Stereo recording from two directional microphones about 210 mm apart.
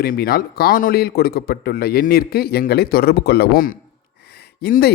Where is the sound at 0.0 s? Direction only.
45° left (ahead or behind).